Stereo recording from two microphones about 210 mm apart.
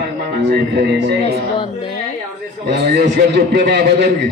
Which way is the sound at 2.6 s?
50° right (ahead or behind).